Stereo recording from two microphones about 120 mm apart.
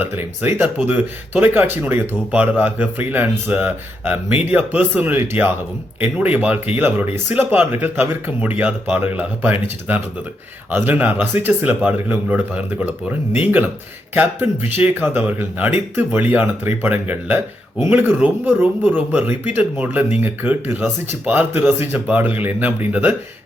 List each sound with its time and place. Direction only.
0.0 s speech: 15° right (ahead or behind)